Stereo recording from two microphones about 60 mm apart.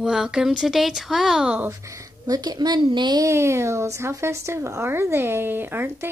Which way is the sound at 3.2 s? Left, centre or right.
Right.